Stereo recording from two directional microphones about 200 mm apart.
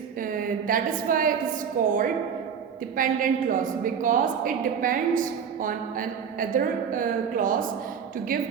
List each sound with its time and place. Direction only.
0.2 s a woman's voice: 45° right (ahead or behind)